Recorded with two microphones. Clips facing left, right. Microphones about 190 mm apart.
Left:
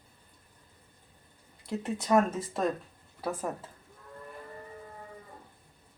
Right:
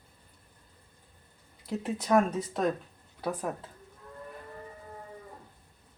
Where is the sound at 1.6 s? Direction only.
Centre (ahead or behind).